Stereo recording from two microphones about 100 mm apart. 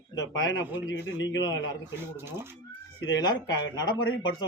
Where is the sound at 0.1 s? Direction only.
40° left (ahead or behind).